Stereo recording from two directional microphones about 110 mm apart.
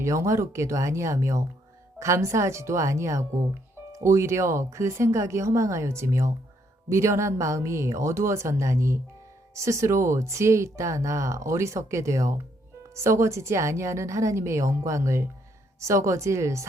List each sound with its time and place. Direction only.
0.0 s speech: 25° right (ahead or behind)